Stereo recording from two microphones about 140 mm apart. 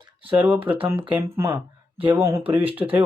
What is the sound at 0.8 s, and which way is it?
Speech, 40° right (ahead or behind).